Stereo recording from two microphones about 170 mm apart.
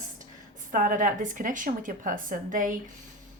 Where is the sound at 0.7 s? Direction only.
50° right (ahead or behind).